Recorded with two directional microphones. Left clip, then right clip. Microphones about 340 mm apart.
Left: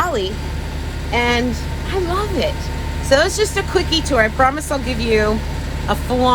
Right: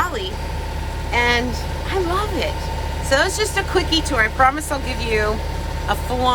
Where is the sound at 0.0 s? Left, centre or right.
Centre.